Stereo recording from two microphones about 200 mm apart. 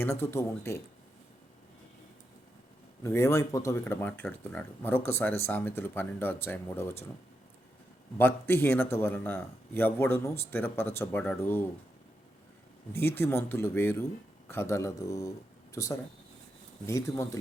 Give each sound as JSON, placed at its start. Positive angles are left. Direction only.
{"t": 0.0, "sound": "speech", "side_deg": 10}
{"t": 3.0, "sound": "speech", "side_deg": 15}
{"t": 8.2, "sound": "speech", "side_deg": 10}
{"t": 12.9, "sound": "speech", "side_deg": 10}